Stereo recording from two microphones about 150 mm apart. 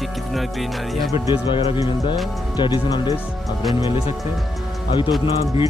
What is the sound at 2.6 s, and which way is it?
Speech, 30° left (ahead or behind).